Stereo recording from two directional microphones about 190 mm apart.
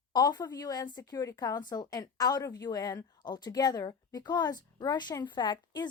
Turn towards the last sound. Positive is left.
turn(degrees=25)  # may be behind; listen again after turning